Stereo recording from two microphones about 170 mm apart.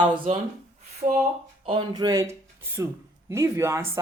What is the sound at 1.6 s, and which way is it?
Speech, 25° right (ahead or behind).